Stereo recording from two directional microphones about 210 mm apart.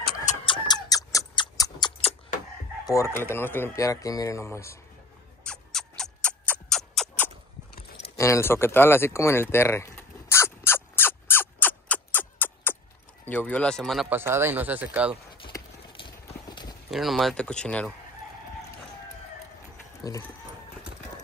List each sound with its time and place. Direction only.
0.0 s chicken: 35° left (ahead or behind)
0.5 s a sound: 20° left (ahead or behind)
2.9 s speech: 10° left (ahead or behind)
5.4 s music: 5° left (ahead or behind)
8.2 s a sound: 15° left (ahead or behind)
13.3 s speech: 5° left (ahead or behind)
14.0 s speech: 10° right (ahead or behind)
15.4 s clip-clop: 25° left (ahead or behind)
16.9 s speech: centre (ahead or behind)
20.0 s speech: 20° left (ahead or behind)